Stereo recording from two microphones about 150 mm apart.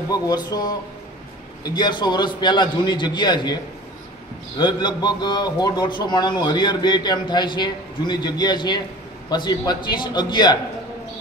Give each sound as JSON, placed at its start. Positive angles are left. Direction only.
{"t": 0.1, "sound": "a man's voice", "side_deg": 25}
{"t": 4.6, "sound": "a man's voice", "side_deg": 30}